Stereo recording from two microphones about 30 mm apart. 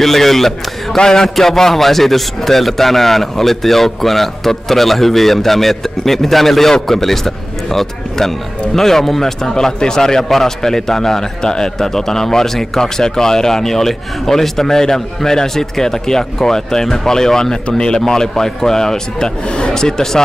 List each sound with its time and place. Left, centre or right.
0.0 s a man's voice: centre
0.9 s a man's voice: centre
1.3 s a man's voice: centre